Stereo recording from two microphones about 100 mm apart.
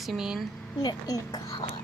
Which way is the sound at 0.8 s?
40° left (ahead or behind).